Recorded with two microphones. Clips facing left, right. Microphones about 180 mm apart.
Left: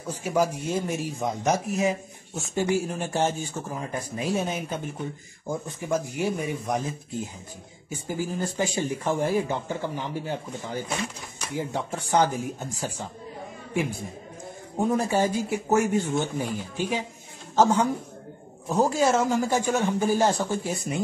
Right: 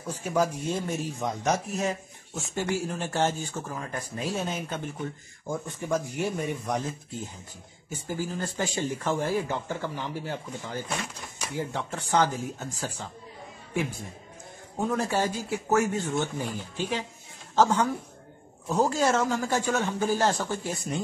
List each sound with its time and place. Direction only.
0.2 s a man's voice: 10° left (ahead or behind)
7.9 s a man's voice: 10° left (ahead or behind)
14.9 s a man's voice: 15° left (ahead or behind)